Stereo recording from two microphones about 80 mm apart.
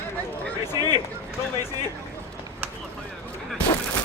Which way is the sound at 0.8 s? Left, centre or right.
Right.